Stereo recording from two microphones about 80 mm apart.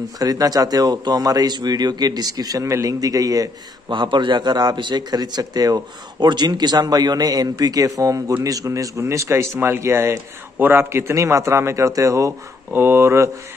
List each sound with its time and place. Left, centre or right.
0.2 s speech: right
3.9 s a man's voice: right
12.7 s speech: right